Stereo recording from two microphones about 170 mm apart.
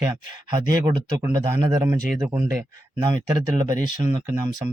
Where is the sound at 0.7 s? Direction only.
20° right (ahead or behind).